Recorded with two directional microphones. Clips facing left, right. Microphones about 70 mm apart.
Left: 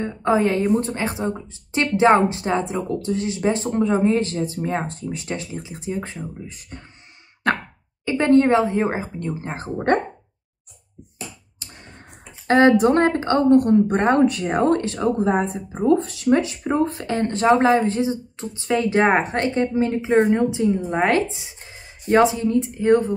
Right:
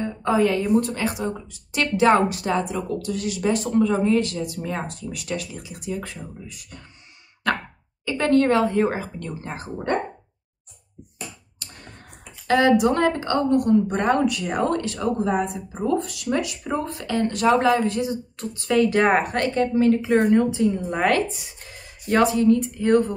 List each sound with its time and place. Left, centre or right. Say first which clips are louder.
0.0 s a woman's voice: left 1 dB; left
8.0 s a woman's voice: left 3 dB; left
11.6 s a sound: even; left
12.4 s a woman's voice: left 3 dB; left